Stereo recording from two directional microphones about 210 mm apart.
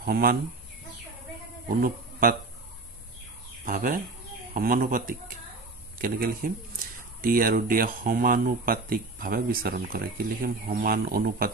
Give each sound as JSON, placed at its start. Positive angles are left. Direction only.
{"t": 0.0, "sound": "speech", "side_deg": -45}
{"t": 1.7, "sound": "a man's voice", "side_deg": -45}
{"t": 3.6, "sound": "speech", "side_deg": -40}